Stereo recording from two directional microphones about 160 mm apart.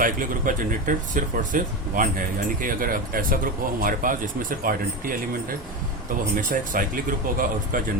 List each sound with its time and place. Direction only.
0.0 s speech: 55° right (ahead or behind)